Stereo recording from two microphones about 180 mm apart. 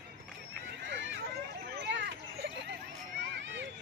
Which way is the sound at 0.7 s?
85° right.